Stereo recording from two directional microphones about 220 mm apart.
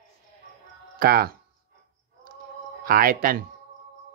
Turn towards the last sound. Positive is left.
turn(degrees=-40)  # may be behind; listen again after turning